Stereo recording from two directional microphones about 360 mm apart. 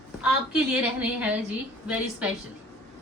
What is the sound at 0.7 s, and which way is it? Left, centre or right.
Speech, centre.